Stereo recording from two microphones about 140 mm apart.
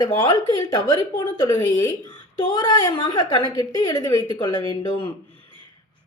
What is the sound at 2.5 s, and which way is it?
A woman's voice, 30° left (ahead or behind).